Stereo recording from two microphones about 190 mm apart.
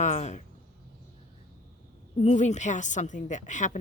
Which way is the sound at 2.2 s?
35° left (ahead or behind).